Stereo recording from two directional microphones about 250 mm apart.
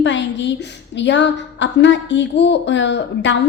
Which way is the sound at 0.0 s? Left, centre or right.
Left.